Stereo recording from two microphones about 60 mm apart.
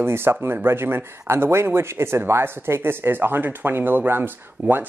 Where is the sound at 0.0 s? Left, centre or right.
Right.